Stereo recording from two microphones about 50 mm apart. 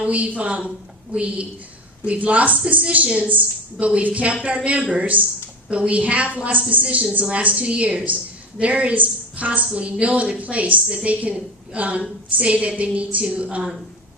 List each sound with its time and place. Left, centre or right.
0.0 s a woman's voice: right